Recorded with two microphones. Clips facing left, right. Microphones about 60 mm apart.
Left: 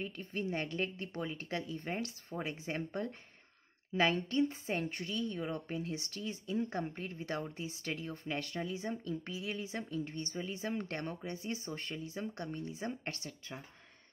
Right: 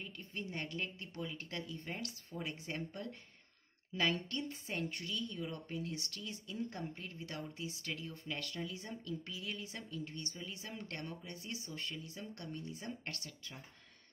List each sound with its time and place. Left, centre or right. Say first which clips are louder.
0.0 s a woman's voice: left 7 dB; left